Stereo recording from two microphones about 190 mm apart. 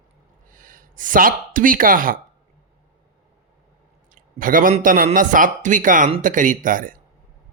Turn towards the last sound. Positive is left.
turn(degrees=-45)  # may be behind; listen again after turning